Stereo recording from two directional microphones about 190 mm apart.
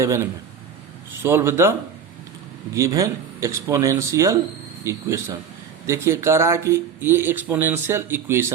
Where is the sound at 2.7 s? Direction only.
15° right (ahead or behind).